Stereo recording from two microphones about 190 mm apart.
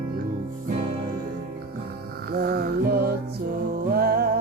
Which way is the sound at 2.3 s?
55° right (ahead or behind).